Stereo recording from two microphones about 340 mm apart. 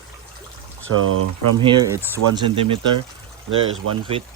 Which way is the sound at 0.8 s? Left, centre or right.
Right.